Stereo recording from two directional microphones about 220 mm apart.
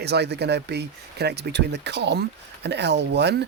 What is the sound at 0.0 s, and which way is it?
Speech, 50° right (ahead or behind).